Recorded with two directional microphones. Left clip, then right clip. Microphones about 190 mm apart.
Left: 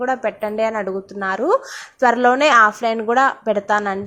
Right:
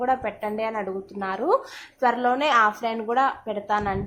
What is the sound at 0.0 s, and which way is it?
A woman's voice, 15° left (ahead or behind).